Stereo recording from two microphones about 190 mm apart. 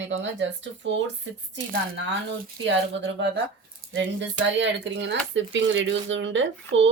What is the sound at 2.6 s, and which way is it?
Speech, 70° right (ahead or behind).